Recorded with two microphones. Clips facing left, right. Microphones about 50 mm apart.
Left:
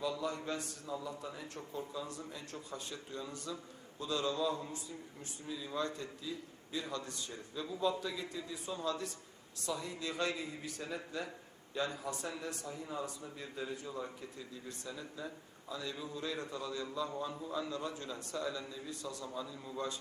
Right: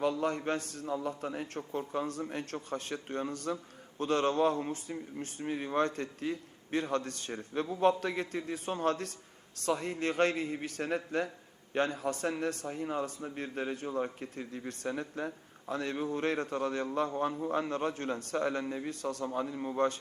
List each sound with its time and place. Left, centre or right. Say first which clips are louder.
0.0 s a man's voice: right 7 dB; right